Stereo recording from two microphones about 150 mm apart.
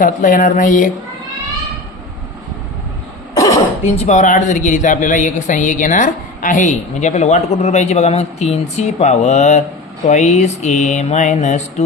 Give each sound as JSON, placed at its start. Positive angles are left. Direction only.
{"t": 0.0, "sound": "speech", "side_deg": 65}
{"t": 3.3, "sound": "throat clearing", "side_deg": 20}
{"t": 3.9, "sound": "speech", "side_deg": 50}